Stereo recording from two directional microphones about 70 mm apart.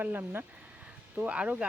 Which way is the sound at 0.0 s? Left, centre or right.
Right.